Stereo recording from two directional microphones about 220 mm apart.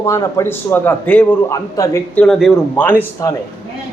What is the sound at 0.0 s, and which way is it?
A man's voice, 15° left (ahead or behind).